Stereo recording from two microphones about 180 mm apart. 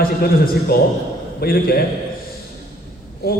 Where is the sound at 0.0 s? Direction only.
55° left (ahead or behind).